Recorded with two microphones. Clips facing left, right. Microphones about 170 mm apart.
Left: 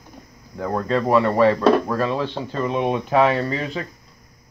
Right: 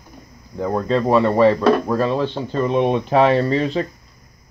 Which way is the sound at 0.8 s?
25° right (ahead or behind).